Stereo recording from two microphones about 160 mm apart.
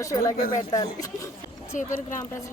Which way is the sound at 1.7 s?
50° left (ahead or behind).